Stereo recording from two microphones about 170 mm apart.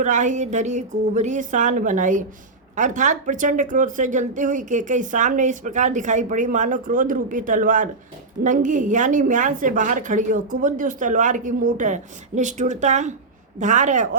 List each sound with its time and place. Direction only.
0.0 s speech: 45° right (ahead or behind)